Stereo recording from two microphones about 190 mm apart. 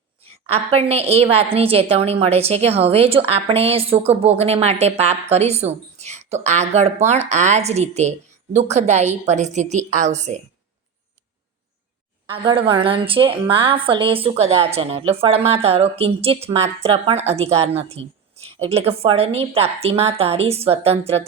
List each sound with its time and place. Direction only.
0.4 s a woman's voice: 35° right (ahead or behind)
12.3 s a woman's voice: 30° right (ahead or behind)